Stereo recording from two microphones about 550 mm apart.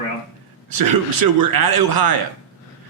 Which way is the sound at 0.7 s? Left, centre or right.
Right.